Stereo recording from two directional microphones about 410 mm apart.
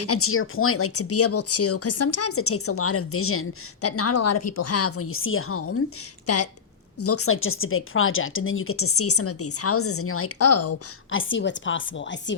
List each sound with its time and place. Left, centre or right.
0.0 s a woman's voice: left